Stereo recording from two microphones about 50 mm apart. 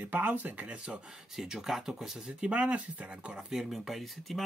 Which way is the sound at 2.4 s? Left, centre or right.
Right.